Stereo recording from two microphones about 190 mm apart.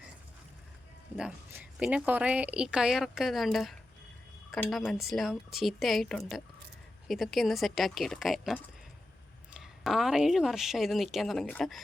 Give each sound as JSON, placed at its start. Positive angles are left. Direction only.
{"t": 1.1, "sound": "a woman's voice", "side_deg": -5}